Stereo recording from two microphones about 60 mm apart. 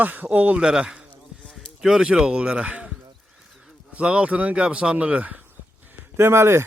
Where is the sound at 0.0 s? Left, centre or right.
Right.